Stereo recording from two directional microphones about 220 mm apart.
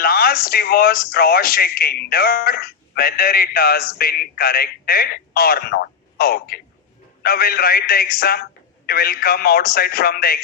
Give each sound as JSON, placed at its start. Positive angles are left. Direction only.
{"t": 0.0, "sound": "speech", "side_deg": 45}